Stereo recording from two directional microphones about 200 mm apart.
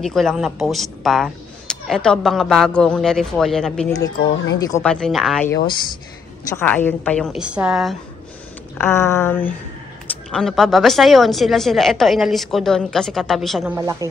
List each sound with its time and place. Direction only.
0.0 s a woman's voice: centre (ahead or behind)
4.6 s a sound: 15° left (ahead or behind)
4.8 s a woman's voice: 5° left (ahead or behind)
6.5 s a woman's voice: 10° left (ahead or behind)
8.7 s a sound: 10° left (ahead or behind)
10.3 s a woman's voice: centre (ahead or behind)
13.7 s a woman's voice: 15° right (ahead or behind)